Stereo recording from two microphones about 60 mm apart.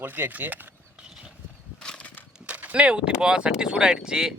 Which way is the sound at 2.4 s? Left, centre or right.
Right.